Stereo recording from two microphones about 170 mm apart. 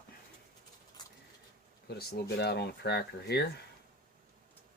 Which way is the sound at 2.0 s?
70° left (ahead or behind).